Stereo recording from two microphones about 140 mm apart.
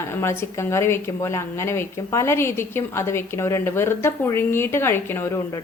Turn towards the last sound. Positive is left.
turn(degrees=15)  # may be behind; listen again after turning